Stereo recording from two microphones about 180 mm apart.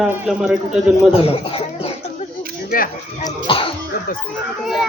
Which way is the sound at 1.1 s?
30° left (ahead or behind).